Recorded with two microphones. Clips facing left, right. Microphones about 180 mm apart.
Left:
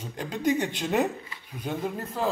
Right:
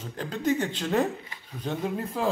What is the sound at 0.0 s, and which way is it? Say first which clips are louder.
A man's voice: left 1 dB; 15° left (ahead or behind).